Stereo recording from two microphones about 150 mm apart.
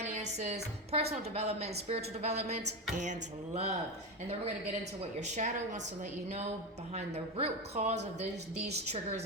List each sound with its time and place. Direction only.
0.0 s a woman's voice: 50° right (ahead or behind)
5.2 s speech: 55° right (ahead or behind)
6.9 s speech: 45° right (ahead or behind)